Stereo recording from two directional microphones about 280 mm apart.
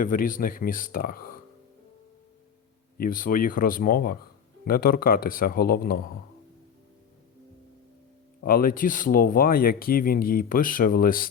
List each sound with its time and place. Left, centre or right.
0.0 s speech: left
3.0 s speech: left
8.4 s speech: left